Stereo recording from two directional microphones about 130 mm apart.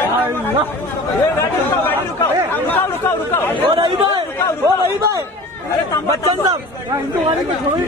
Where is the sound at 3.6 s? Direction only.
40° right (ahead or behind).